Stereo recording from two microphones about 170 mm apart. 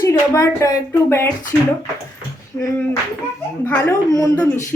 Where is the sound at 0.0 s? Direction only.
15° left (ahead or behind).